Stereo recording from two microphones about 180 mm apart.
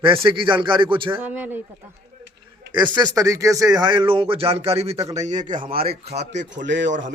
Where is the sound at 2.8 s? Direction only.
20° right (ahead or behind); by 5.4 s 40° right (ahead or behind).